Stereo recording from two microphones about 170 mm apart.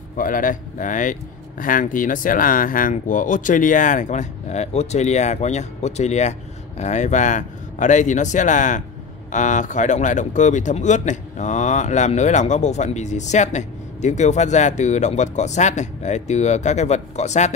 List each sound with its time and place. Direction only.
0.2 s speech: 50° left (ahead or behind)